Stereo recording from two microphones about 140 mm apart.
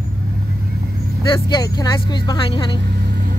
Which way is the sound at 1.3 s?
30° left (ahead or behind).